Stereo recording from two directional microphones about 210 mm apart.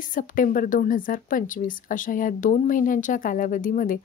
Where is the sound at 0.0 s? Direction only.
40° left (ahead or behind).